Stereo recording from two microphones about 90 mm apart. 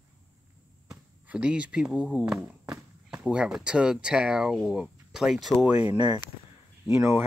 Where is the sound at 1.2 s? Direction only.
15° right (ahead or behind).